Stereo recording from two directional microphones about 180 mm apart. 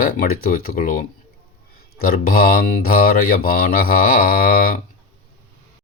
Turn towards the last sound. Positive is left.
turn(degrees=55)  # may be behind; listen again after turning